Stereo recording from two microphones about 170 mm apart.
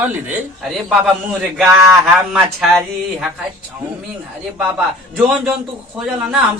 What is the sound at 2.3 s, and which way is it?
Speech, centre (ahead or behind).